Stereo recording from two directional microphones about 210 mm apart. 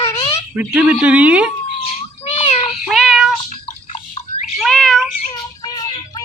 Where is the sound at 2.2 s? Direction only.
30° left (ahead or behind).